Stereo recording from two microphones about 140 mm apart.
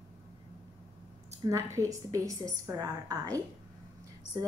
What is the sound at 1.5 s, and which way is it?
A woman's voice, 20° right (ahead or behind).